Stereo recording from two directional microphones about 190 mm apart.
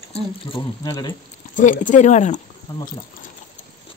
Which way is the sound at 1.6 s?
40° left (ahead or behind).